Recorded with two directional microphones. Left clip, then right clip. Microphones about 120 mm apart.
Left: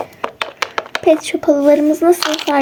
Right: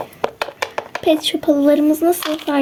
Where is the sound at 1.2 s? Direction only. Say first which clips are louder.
Left 3 dB; 10° right (ahead or behind).